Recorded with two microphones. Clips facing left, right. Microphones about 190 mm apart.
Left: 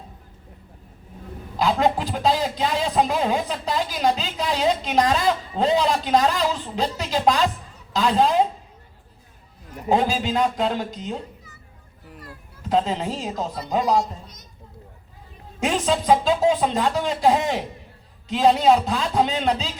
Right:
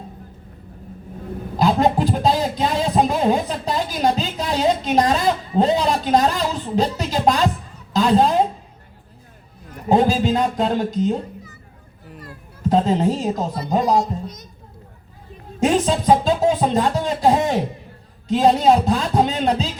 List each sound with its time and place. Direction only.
1.5 s a woman's voice: 45° right (ahead or behind)
9.9 s speech: 45° right (ahead or behind)
12.6 s speech: 45° right (ahead or behind)
13.9 s a child's voice: 20° right (ahead or behind)
15.6 s speech: 45° right (ahead or behind)